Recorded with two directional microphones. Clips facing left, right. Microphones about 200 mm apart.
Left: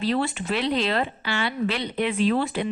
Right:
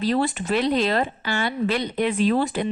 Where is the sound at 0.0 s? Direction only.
45° right (ahead or behind).